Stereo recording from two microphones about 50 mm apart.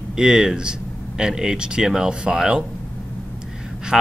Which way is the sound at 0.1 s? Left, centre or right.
Centre.